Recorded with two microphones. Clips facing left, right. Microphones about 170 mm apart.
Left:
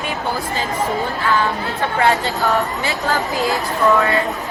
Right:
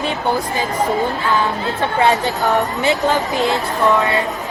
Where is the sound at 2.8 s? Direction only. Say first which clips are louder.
Right 4 dB; 20° right (ahead or behind).